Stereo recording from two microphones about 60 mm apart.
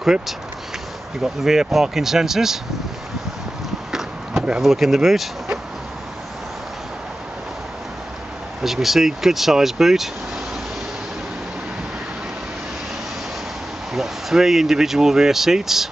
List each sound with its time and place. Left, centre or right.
1.2 s speech: centre
3.9 s a sound: centre
8.6 s speech: centre
13.9 s speech: centre